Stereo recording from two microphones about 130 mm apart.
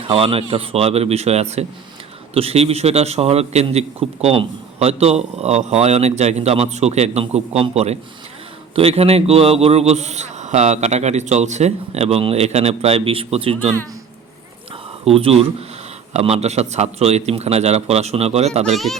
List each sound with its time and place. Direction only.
0.1 s a man's voice: 45° right (ahead or behind)
15.0 s a man's voice: 50° right (ahead or behind)